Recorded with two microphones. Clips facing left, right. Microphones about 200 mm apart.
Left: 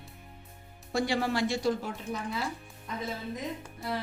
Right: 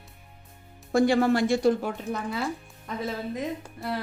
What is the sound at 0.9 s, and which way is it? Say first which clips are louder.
A woman's voice: right 8 dB; 50° right (ahead or behind).